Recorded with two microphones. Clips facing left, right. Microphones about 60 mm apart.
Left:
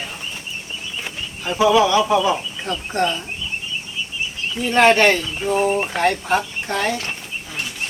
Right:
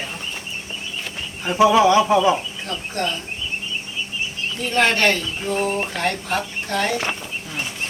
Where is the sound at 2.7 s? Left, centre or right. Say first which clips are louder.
Left 5 dB; left.